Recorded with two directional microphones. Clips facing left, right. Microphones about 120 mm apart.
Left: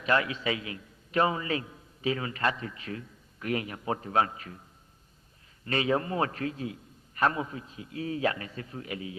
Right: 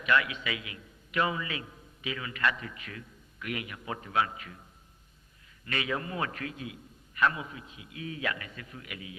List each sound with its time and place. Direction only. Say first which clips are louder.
0.0 s a man's voice: left 1 dB; 35° left (ahead or behind)
5.6 s a man's voice: left 6 dB; 35° left (ahead or behind)